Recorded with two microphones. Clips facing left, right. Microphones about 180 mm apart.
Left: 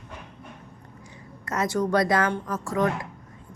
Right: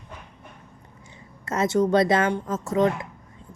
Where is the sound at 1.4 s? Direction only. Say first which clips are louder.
Right 4 dB; 25° right (ahead or behind).